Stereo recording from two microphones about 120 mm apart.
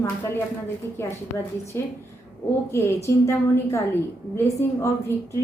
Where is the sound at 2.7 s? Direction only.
20° left (ahead or behind).